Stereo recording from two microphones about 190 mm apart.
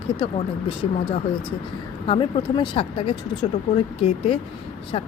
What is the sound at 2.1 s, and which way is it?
Speech, 25° left (ahead or behind).